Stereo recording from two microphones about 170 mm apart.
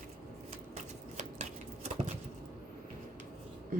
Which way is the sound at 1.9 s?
45° right (ahead or behind).